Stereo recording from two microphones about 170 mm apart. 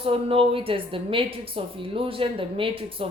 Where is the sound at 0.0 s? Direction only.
35° right (ahead or behind).